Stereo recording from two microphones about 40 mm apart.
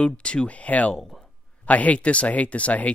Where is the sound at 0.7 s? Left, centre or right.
Left.